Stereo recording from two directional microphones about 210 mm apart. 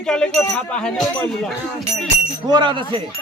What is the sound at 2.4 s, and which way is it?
Speech, 20° right (ahead or behind).